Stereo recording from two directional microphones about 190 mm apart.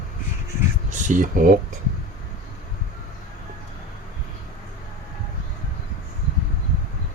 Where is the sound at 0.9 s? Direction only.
40° right (ahead or behind).